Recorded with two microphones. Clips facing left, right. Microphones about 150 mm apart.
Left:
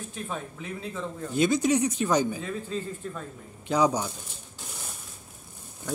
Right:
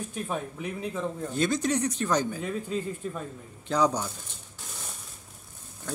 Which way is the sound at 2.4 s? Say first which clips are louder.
Right 2 dB; 10° right (ahead or behind).